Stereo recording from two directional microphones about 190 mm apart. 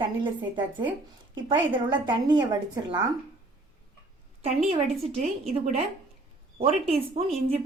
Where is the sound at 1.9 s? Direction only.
25° right (ahead or behind).